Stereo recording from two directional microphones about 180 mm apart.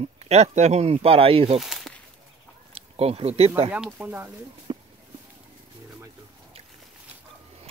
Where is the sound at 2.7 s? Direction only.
35° right (ahead or behind).